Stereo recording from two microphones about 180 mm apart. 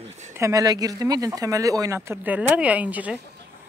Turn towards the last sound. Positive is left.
turn(degrees=-10)  # may be behind; listen again after turning